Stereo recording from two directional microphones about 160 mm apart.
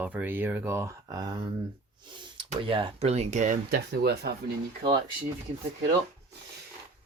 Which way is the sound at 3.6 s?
80° right.